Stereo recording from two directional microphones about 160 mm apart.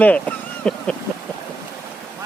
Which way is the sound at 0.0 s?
10° left (ahead or behind).